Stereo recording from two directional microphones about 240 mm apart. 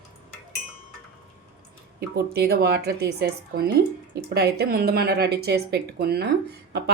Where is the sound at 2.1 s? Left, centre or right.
Right.